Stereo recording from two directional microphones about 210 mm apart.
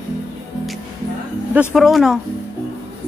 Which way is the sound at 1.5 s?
5° right (ahead or behind).